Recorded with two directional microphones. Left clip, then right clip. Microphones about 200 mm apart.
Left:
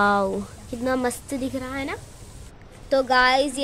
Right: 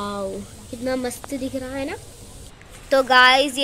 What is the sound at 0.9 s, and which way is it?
A woman's voice, 30° left (ahead or behind).